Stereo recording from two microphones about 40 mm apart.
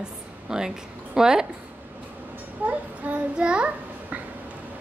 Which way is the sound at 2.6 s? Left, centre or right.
Right.